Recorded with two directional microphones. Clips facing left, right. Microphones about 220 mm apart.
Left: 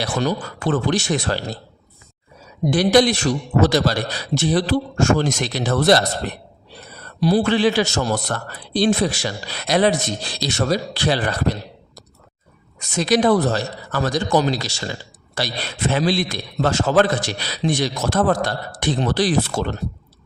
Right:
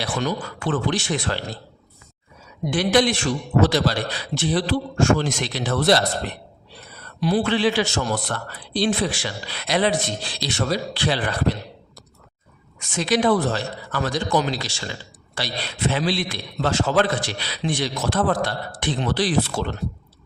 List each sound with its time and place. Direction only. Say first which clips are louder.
0.0 s speech: left 3 dB; 40° left (ahead or behind)
2.6 s a man's voice: left 4 dB; 40° left (ahead or behind)
12.8 s a man's voice: left 3 dB; 40° left (ahead or behind)